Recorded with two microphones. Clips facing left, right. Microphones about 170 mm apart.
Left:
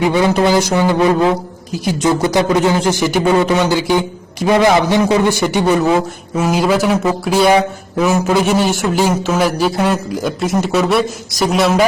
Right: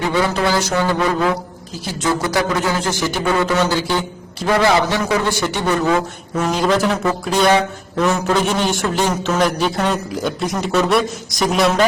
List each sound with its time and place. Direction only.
0.0 s a man's voice: 15° left (ahead or behind)